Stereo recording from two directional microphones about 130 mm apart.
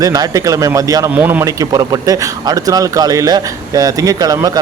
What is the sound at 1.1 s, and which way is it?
Speech, 10° right (ahead or behind).